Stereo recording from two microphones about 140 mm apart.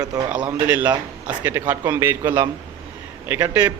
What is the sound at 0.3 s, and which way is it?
A man's voice, 10° right (ahead or behind).